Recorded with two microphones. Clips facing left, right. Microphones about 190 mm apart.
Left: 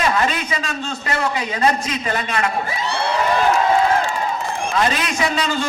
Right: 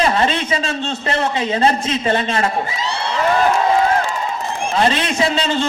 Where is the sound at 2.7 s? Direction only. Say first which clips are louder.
Left 1 dB; 55° left (ahead or behind).